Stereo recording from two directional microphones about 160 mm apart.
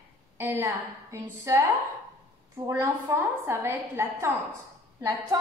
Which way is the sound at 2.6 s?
20° right (ahead or behind).